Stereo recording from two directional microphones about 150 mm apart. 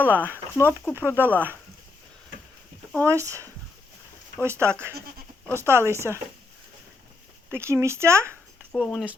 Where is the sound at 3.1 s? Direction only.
20° right (ahead or behind).